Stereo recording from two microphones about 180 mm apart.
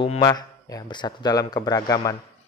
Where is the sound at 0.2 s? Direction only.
20° left (ahead or behind).